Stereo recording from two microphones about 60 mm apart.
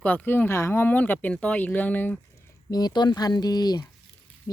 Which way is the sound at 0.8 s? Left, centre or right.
Left.